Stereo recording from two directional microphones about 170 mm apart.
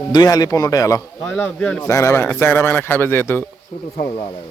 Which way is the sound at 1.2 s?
5° left (ahead or behind).